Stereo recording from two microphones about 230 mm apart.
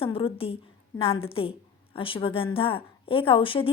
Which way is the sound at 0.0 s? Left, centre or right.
Left.